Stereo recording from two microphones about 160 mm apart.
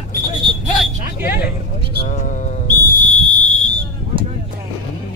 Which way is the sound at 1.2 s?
70° left (ahead or behind).